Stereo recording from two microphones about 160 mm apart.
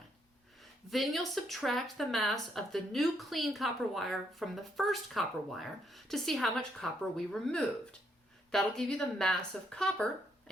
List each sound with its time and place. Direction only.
0.9 s speech: centre (ahead or behind)